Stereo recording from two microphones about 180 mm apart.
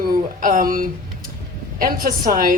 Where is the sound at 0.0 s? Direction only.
50° right (ahead or behind).